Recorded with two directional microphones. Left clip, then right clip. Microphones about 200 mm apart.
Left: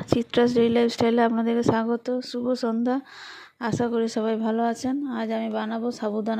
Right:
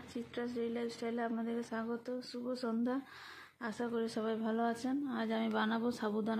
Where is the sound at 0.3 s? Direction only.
45° left (ahead or behind).